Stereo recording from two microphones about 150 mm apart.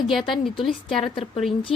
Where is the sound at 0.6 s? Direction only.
Centre (ahead or behind).